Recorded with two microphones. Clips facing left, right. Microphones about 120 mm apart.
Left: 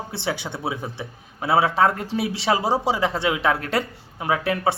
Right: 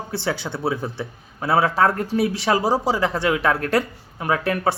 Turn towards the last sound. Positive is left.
turn(degrees=20)  # may be behind; listen again after turning